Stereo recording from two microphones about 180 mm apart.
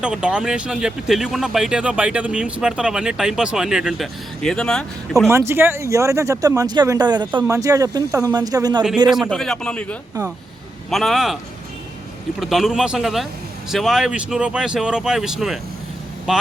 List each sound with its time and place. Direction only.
0.0 s speech: 5° right (ahead or behind)
5.3 s speech: 15° right (ahead or behind)
9.3 s speech: 5° left (ahead or behind)
10.9 s speech: centre (ahead or behind)
12.4 s speech: centre (ahead or behind)